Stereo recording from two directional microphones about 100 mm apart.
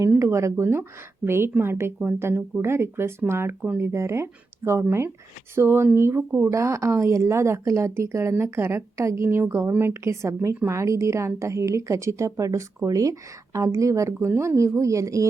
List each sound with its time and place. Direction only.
0.2 s a woman's voice: 30° right (ahead or behind)